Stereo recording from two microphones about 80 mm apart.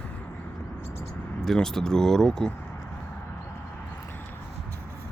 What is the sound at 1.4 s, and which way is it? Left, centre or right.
Speech, centre.